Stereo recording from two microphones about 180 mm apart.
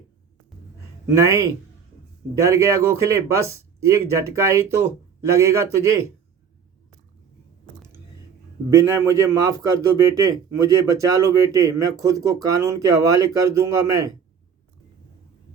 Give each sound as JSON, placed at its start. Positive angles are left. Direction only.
{"t": 1.1, "sound": "a man's voice", "side_deg": -15}
{"t": 8.7, "sound": "a man's voice", "side_deg": -15}